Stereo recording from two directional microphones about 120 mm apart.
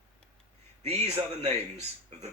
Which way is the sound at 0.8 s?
60° right (ahead or behind).